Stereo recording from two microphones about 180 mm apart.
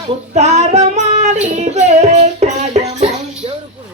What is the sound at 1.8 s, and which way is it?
Child singing, 40° right (ahead or behind).